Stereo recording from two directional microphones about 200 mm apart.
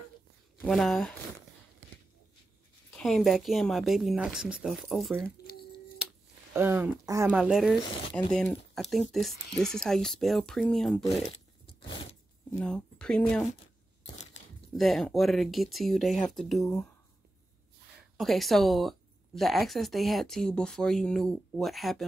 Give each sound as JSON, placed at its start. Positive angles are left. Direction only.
{"t": 0.6, "sound": "speech", "side_deg": 0}
{"t": 3.0, "sound": "speech", "side_deg": 0}
{"t": 5.5, "sound": "a sound", "side_deg": 50}
{"t": 6.0, "sound": "a sound", "side_deg": -5}
{"t": 6.5, "sound": "speech", "side_deg": -10}
{"t": 12.5, "sound": "speech", "side_deg": 5}
{"t": 14.7, "sound": "speech", "side_deg": 0}
{"t": 18.1, "sound": "speech", "side_deg": 0}